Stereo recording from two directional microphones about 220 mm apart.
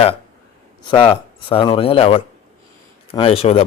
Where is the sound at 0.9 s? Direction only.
25° left (ahead or behind).